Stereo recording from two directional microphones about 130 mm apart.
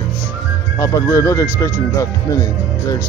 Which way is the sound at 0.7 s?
25° left (ahead or behind).